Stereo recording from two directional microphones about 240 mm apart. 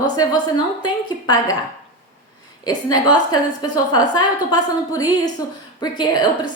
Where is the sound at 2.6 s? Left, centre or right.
Centre.